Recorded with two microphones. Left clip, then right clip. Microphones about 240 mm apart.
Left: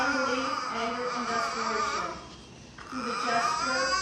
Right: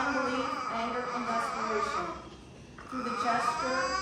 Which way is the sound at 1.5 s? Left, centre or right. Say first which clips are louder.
Left 2 dB; right.